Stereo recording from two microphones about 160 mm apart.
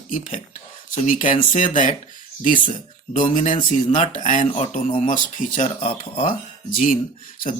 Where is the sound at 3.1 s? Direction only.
50° left (ahead or behind).